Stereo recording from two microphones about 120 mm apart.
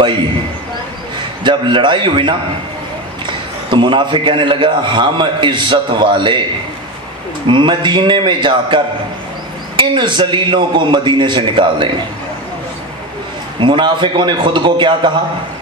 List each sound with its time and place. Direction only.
1.4 s a man's voice: 40° right (ahead or behind)
3.7 s a man's voice: 45° right (ahead or behind)
7.4 s a man's voice: 45° right (ahead or behind)
13.6 s a man's voice: 40° right (ahead or behind)